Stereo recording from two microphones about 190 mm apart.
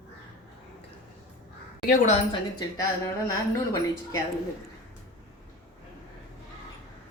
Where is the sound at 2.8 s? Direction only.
20° left (ahead or behind).